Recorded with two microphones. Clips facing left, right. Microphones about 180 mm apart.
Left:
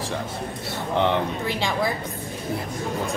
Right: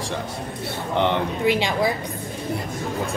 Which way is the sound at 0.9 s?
Centre (ahead or behind).